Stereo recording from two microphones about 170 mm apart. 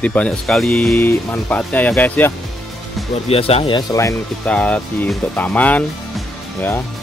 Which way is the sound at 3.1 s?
35° left (ahead or behind).